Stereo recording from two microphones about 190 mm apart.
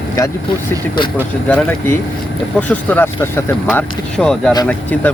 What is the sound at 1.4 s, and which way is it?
Speech, 10° left (ahead or behind).